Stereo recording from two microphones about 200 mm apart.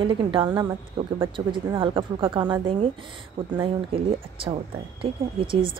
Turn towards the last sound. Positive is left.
turn(degrees=-25)  # may be behind; listen again after turning